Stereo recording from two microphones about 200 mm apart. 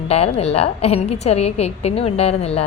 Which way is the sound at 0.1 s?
30° left (ahead or behind).